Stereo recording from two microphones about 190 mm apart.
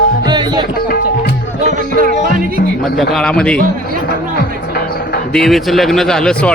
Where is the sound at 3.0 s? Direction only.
Centre (ahead or behind).